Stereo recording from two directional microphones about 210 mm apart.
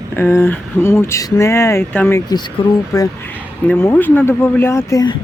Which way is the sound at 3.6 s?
10° left (ahead or behind).